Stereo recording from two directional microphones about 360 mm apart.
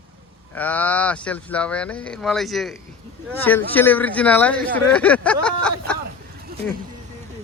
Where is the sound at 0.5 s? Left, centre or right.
Centre.